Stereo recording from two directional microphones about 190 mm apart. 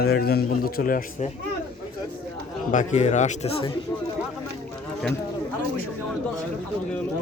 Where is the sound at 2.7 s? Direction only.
35° left (ahead or behind).